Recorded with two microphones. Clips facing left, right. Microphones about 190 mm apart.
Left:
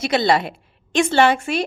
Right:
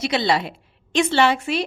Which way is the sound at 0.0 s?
50° left (ahead or behind).